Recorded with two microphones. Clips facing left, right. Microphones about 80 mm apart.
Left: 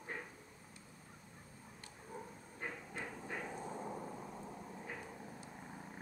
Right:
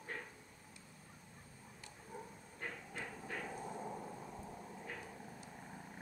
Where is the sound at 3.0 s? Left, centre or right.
Centre.